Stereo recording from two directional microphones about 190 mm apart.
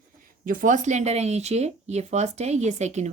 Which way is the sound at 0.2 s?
45° right (ahead or behind).